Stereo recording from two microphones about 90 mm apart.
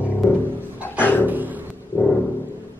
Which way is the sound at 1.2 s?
20° right (ahead or behind).